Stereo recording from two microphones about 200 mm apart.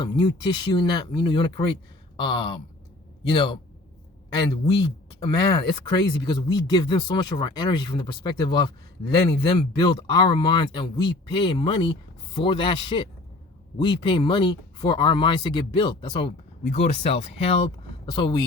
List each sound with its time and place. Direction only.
0.0 s speech: 20° left (ahead or behind)
2.1 s a sound: 20° left (ahead or behind)
3.2 s speech: 25° left (ahead or behind)